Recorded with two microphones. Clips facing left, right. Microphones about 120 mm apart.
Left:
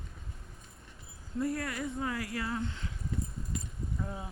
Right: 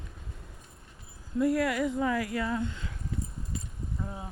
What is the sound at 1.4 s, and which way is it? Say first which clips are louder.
Speech: right 7 dB; 90° right.